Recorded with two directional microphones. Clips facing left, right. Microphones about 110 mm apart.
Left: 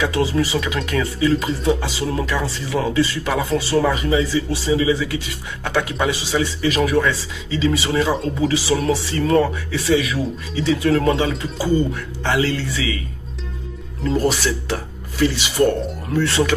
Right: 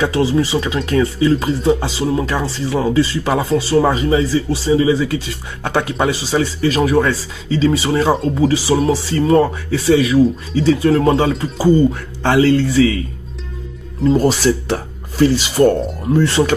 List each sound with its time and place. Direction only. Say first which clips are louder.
0.0 s speech: right 4 dB; 30° right (ahead or behind)
14.0 s speech: right 6 dB; 35° right (ahead or behind)